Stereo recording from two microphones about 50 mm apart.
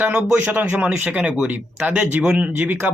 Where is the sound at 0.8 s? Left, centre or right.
Right.